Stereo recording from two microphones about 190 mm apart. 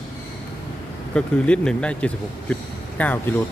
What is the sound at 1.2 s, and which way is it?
Speech, 5° left (ahead or behind).